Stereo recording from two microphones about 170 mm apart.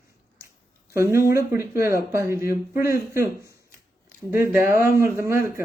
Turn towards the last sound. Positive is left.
turn(degrees=-15)  # may be behind; listen again after turning